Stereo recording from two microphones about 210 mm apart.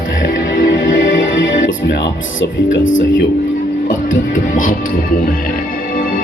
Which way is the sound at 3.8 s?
40° left (ahead or behind).